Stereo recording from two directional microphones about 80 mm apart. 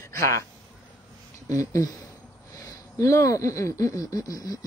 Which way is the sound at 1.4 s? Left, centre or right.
Left.